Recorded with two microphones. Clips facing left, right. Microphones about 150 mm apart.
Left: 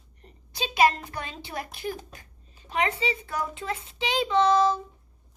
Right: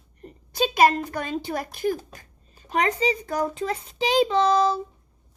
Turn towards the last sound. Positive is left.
turn(degrees=-35)  # may be behind; listen again after turning